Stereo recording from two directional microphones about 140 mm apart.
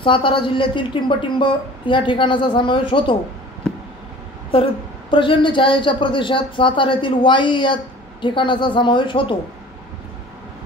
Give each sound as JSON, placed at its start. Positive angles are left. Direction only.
{"t": 0.0, "sound": "a man's voice", "side_deg": 35}
{"t": 4.5, "sound": "a man's voice", "side_deg": 40}